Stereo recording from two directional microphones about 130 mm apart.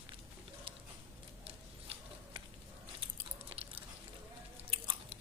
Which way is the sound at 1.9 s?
50° right (ahead or behind).